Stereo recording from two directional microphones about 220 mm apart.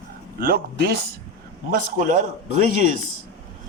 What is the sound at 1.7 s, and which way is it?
Speech, 35° right (ahead or behind).